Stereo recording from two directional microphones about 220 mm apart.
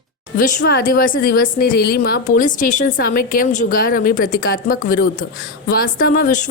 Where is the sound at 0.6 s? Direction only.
45° left (ahead or behind).